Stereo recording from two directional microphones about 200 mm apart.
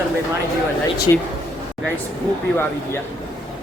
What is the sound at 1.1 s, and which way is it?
Speech, 20° left (ahead or behind).